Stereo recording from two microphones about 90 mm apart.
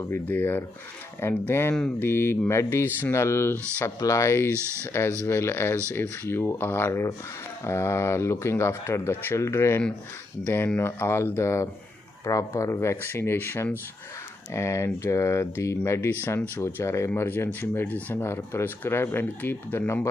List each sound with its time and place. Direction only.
0.0 s speech: 25° left (ahead or behind)
12.9 s speech: 25° left (ahead or behind)